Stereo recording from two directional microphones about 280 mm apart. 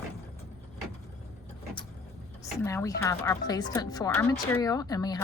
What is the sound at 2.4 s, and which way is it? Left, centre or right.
A woman's voice, centre.